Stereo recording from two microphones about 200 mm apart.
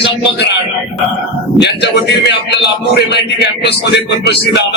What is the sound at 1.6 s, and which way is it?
A man's voice, 60° left (ahead or behind).